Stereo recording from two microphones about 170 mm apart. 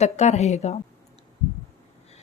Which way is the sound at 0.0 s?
40° left (ahead or behind).